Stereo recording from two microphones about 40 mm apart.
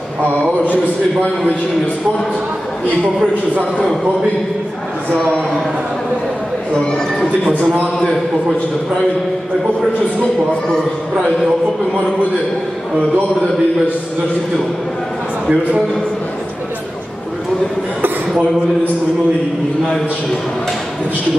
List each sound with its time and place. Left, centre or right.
7.6 s speech: right